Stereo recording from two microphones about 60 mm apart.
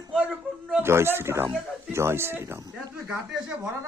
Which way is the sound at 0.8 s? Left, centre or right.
Right.